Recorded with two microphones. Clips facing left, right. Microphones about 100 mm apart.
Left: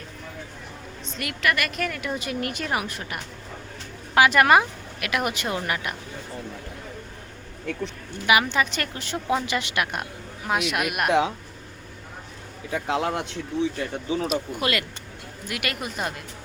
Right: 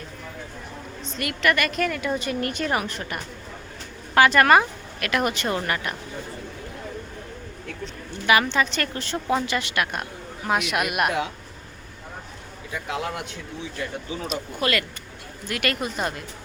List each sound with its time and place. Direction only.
1.0 s a woman's voice: centre (ahead or behind)
8.3 s speech: 15° left (ahead or behind)
10.4 s a woman's voice: centre (ahead or behind)
12.7 s speech: 30° left (ahead or behind)
14.3 s speech: 15° left (ahead or behind)